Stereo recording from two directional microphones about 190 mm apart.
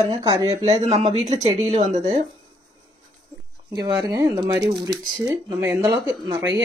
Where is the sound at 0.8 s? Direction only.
35° right (ahead or behind).